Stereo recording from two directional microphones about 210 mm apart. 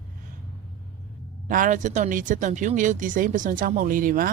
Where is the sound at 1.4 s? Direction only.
40° right (ahead or behind).